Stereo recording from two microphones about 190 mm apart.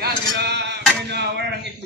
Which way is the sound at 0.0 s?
60° right (ahead or behind).